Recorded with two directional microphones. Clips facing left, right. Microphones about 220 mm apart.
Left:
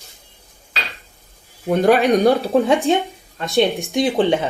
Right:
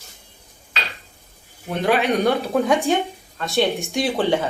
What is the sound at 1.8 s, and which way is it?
Speech, 45° left (ahead or behind).